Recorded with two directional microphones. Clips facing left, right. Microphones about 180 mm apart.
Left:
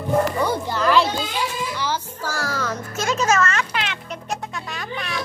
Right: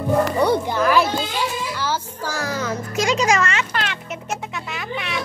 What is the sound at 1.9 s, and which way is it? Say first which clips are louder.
Music: right 1 dB; 15° right (ahead or behind).